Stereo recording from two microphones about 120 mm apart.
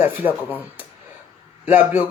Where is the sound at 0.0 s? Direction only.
15° right (ahead or behind).